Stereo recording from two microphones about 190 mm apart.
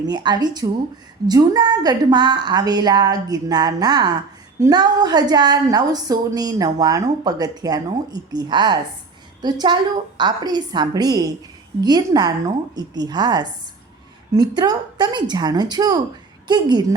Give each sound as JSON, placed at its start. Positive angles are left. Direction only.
{"t": 0.0, "sound": "a woman's voice", "side_deg": -20}